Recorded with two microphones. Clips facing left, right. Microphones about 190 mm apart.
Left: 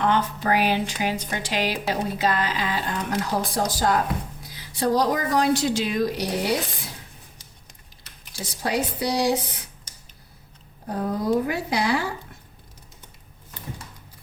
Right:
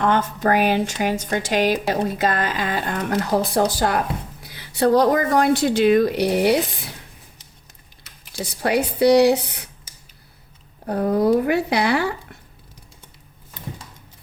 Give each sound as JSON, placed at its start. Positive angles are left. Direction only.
{"t": 0.0, "sound": "speech", "side_deg": -50}
{"t": 8.3, "sound": "speech", "side_deg": -65}
{"t": 10.8, "sound": "speech", "side_deg": -65}